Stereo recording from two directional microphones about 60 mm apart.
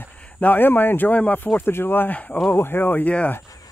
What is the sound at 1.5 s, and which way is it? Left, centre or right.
Speech, left.